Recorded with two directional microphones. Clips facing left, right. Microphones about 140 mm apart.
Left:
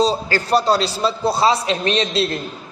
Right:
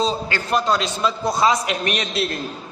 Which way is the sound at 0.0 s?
35° left (ahead or behind).